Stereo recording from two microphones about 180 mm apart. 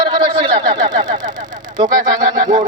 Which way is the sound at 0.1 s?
25° right (ahead or behind).